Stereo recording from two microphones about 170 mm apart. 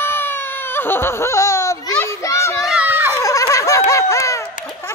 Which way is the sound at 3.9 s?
20° left (ahead or behind).